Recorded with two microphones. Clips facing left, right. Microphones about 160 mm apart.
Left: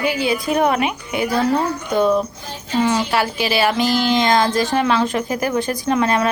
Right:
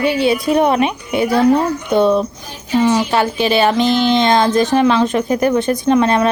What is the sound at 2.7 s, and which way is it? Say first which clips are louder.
A woman's voice: right 4 dB; 15° right (ahead or behind).